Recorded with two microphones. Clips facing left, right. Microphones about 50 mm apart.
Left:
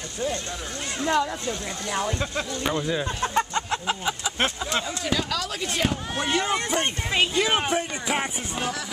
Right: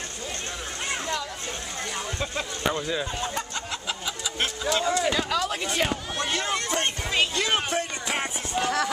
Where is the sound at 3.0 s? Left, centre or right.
Left.